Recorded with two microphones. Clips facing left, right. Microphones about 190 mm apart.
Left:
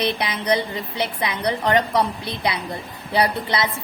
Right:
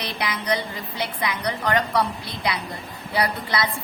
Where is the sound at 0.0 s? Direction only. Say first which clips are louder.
Left 5 dB; 25° left (ahead or behind).